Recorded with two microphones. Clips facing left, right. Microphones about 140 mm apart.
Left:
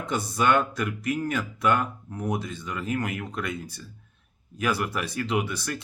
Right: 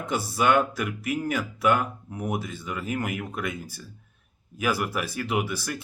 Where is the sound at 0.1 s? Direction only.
5° right (ahead or behind).